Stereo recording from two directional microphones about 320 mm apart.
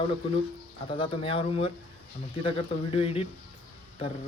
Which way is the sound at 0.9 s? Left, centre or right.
Centre.